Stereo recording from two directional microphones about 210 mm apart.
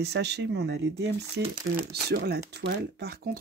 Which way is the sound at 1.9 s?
50° right (ahead or behind).